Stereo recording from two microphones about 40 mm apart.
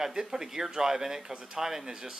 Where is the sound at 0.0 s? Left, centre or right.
Centre.